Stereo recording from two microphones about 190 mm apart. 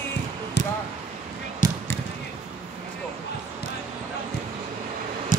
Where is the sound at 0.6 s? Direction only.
65° left (ahead or behind).